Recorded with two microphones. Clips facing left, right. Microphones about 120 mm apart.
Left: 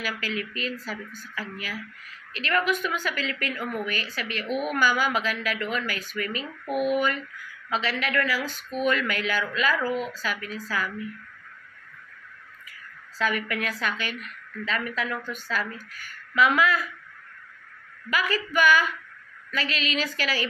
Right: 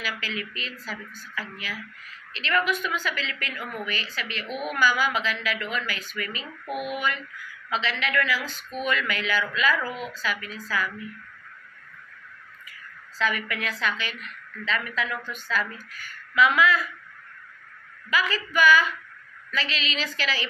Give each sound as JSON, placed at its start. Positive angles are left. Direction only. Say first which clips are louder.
{"t": 0.0, "sound": "a woman's voice", "louder": "left 2 dB", "side_deg": 45}
{"t": 4.5, "sound": "speech", "louder": "left 4 dB", "side_deg": 0}
{"t": 4.7, "sound": "a woman's voice", "louder": "right 2 dB", "side_deg": 50}
{"t": 6.4, "sound": "speech", "louder": "left 7 dB", "side_deg": 0}
{"t": 7.7, "sound": "a woman's voice", "louder": "even", "side_deg": 45}
{"t": 9.8, "sound": "speech", "louder": "left 5 dB", "side_deg": -5}
{"t": 10.2, "sound": "a woman's voice", "louder": "even", "side_deg": 45}
{"t": 13.2, "sound": "a woman's voice", "louder": "left 1 dB", "side_deg": 45}
{"t": 18.3, "sound": "a woman's voice", "louder": "right 1 dB", "side_deg": 50}